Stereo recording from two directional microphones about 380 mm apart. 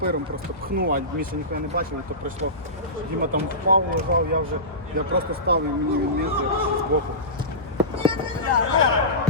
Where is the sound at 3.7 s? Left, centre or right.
Right.